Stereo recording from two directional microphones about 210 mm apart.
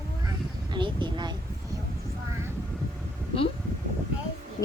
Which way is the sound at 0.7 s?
20° right (ahead or behind).